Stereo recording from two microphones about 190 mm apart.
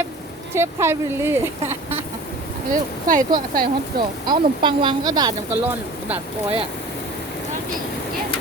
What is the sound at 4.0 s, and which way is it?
Speech, 25° right (ahead or behind).